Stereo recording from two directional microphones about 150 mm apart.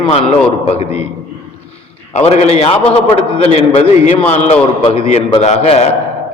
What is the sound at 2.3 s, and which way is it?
A man's voice, 45° left (ahead or behind).